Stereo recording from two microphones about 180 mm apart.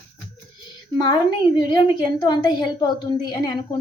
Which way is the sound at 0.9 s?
25° left (ahead or behind).